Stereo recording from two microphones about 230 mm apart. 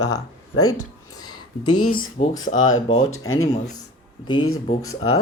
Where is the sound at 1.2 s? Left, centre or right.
Centre.